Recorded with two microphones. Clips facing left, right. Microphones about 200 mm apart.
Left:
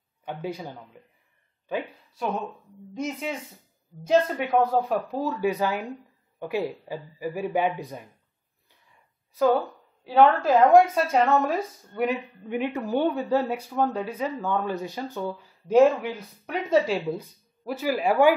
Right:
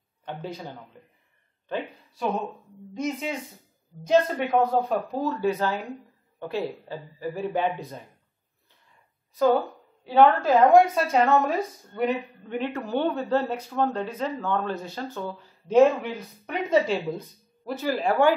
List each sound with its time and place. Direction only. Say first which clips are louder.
0.2 s a man's voice: left 2 dB; 10° left (ahead or behind)
9.3 s a woman's voice: even; centre (ahead or behind)